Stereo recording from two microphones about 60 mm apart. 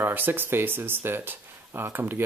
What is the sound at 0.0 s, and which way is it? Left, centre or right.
Speech, right.